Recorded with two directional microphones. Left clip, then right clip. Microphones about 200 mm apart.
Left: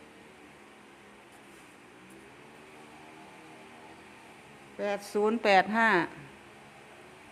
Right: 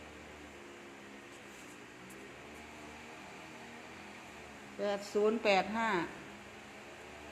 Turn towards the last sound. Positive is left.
turn(degrees=40)  # may be behind; listen again after turning